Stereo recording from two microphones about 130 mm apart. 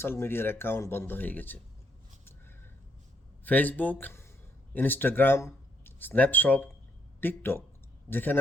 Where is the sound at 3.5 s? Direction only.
15° left (ahead or behind).